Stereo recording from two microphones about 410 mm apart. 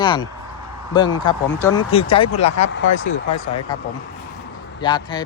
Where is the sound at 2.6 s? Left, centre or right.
Left.